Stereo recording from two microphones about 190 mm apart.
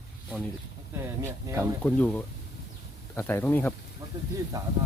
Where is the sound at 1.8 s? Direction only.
10° left (ahead or behind).